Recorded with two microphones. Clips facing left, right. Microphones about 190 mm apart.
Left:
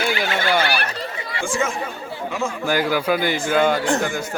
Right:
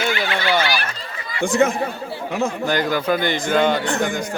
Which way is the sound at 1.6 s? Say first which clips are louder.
Right 8 dB; 60° right (ahead or behind).